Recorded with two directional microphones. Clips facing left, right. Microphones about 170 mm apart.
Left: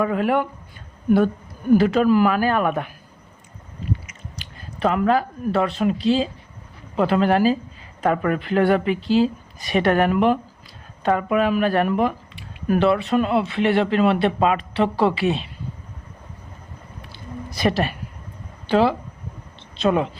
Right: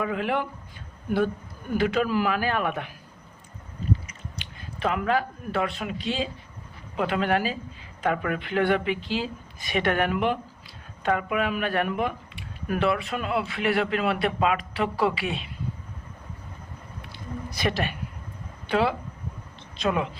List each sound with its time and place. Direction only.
0.0 s speech: 45° left (ahead or behind)
1.7 s speech: 40° left (ahead or behind)
4.8 s speech: 35° left (ahead or behind)
17.6 s speech: 40° left (ahead or behind)